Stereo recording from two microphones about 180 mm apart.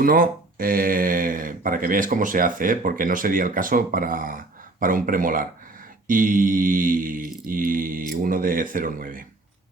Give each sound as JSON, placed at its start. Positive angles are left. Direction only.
{"t": 0.0, "sound": "speech", "side_deg": -55}